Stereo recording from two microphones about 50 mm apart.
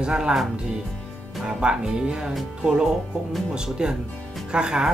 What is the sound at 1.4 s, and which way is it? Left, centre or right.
Speech, centre.